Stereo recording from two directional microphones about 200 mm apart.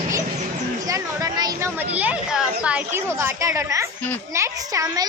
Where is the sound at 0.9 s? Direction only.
15° right (ahead or behind).